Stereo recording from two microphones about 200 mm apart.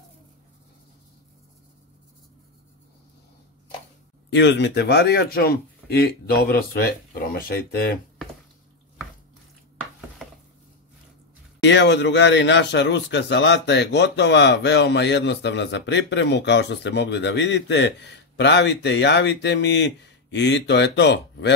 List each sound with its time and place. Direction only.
4.3 s speech: 60° left (ahead or behind)
11.6 s speech: 60° left (ahead or behind)